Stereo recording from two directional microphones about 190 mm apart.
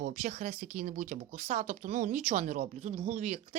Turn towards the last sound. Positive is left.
turn(degrees=-40)  # may be behind; listen again after turning